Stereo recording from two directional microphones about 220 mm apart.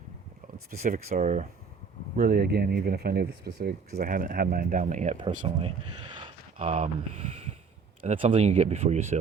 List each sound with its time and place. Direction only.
0.7 s speech: 35° right (ahead or behind)